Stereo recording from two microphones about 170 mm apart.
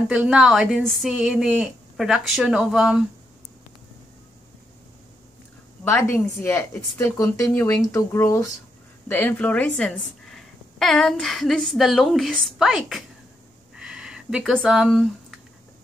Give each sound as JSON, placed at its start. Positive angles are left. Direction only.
{"t": 0.1, "sound": "a woman's voice", "side_deg": -5}
{"t": 5.9, "sound": "a woman's voice", "side_deg": 15}
{"t": 13.7, "sound": "a sound", "side_deg": -5}